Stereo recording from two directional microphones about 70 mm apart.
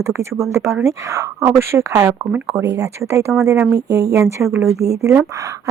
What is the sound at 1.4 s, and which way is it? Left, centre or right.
Speech, right.